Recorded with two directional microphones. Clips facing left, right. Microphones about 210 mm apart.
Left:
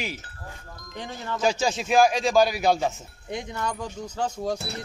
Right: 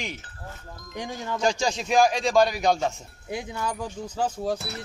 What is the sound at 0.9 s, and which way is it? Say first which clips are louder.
Speech: right 2 dB; 15° right (ahead or behind).